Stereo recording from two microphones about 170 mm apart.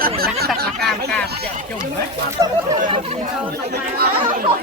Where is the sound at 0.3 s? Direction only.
65° right (ahead or behind).